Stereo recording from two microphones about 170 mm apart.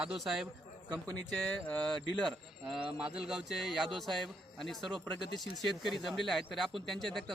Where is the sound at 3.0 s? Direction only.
5° right (ahead or behind).